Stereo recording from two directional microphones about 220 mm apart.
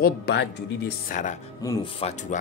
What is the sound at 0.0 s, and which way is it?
Speech, 50° left (ahead or behind).